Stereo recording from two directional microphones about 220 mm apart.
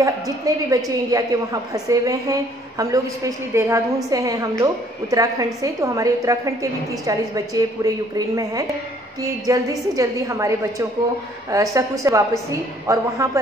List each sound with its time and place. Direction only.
0.7 s a woman's voice: 15° right (ahead or behind)
9.2 s a woman's voice: 15° right (ahead or behind)